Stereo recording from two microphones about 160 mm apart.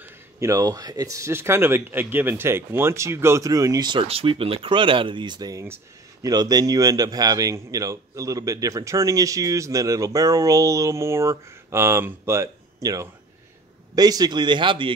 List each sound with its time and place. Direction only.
0.0 s speech: 20° right (ahead or behind)